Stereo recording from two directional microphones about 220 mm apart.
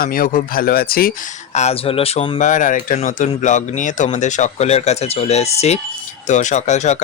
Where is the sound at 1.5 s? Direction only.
30° left (ahead or behind).